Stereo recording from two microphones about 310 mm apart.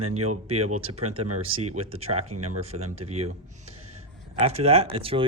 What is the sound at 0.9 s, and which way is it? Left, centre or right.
Speech, right.